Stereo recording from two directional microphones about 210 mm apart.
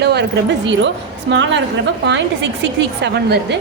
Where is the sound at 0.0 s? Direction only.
50° right (ahead or behind).